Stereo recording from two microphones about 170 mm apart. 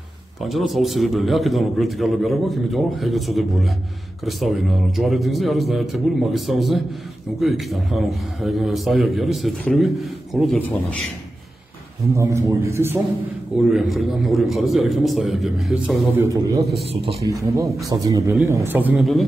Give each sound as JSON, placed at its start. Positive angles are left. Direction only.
{"t": 0.5, "sound": "a man's voice", "side_deg": 0}
{"t": 12.1, "sound": "a man's voice", "side_deg": -15}
{"t": 13.7, "sound": "a man's voice", "side_deg": 0}
{"t": 16.1, "sound": "a man's voice", "side_deg": -15}
{"t": 16.8, "sound": "speech", "side_deg": -35}
{"t": 17.3, "sound": "a man's voice", "side_deg": -20}
{"t": 18.9, "sound": "a man's voice", "side_deg": 0}